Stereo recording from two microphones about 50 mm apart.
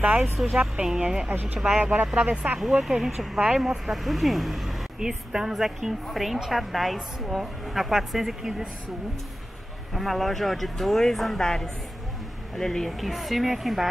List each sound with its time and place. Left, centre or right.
0.2 s a woman's voice: centre
1.0 s a woman's voice: centre
1.3 s speech: right
2.8 s a woman's voice: centre
4.9 s a woman's voice: centre
9.9 s a woman's voice: centre